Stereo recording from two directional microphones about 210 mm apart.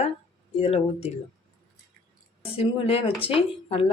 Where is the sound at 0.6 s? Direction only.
30° left (ahead or behind).